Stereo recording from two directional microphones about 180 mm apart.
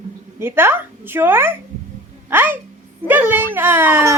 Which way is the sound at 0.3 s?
10° right (ahead or behind).